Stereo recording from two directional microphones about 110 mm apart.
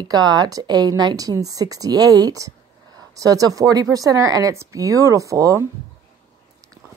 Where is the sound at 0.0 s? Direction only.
40° right (ahead or behind).